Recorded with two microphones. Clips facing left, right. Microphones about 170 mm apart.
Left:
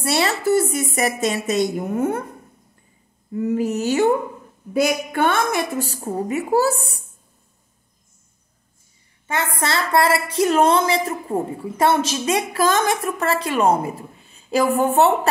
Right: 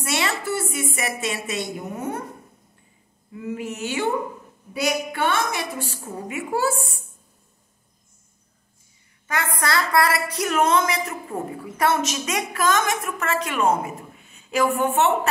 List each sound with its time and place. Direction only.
0.0 s a woman's voice: 35° left (ahead or behind); by 2.2 s 50° left (ahead or behind)
3.3 s a woman's voice: 40° left (ahead or behind)
9.6 s a woman's voice: 25° left (ahead or behind)